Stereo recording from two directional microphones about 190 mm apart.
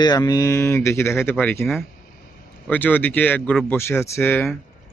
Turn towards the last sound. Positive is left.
turn(degrees=10)  # may be behind; listen again after turning